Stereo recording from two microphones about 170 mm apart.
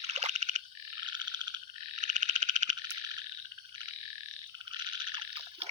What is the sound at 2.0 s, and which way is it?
Frog, 45° right (ahead or behind).